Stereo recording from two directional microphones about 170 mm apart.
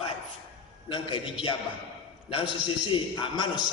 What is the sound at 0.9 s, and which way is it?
A man's voice, 30° left (ahead or behind).